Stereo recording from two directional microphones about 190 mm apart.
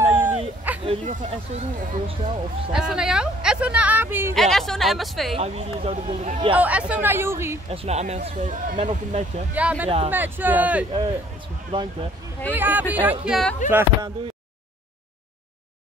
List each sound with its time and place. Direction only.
0.0 s a sound: 10° right (ahead or behind)
0.8 s speech: 40° right (ahead or behind)
2.7 s speech: 5° right (ahead or behind)
4.4 s speech: centre (ahead or behind)
5.4 s speech: 35° right (ahead or behind)
6.5 s speech: 5° right (ahead or behind)
7.7 s speech: 35° right (ahead or behind)
9.5 s speech: 10° right (ahead or behind)
11.7 s speech: 25° right (ahead or behind)
12.5 s speech: 10° right (ahead or behind)
13.7 s speech: 10° right (ahead or behind)